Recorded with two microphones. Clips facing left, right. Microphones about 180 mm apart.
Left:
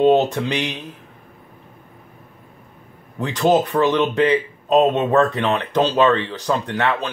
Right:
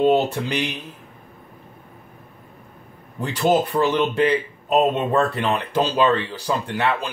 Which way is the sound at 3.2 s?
70° left (ahead or behind).